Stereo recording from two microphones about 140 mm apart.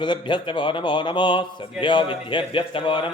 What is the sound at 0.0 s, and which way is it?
Speech, 35° left (ahead or behind).